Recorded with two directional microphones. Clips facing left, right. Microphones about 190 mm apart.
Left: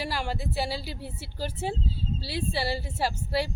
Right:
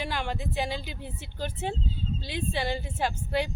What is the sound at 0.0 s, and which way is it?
A woman's voice, 5° left (ahead or behind).